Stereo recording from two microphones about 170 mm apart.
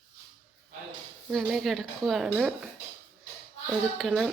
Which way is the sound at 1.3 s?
Centre (ahead or behind).